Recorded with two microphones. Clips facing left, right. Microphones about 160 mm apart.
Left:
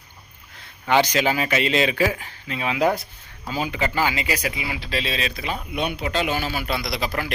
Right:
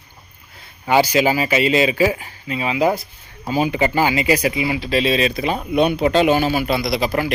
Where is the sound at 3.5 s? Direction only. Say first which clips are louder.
Right 7 dB; 15° right (ahead or behind).